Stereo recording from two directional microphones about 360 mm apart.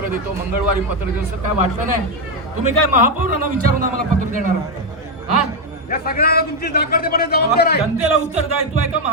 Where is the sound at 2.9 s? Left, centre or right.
Right.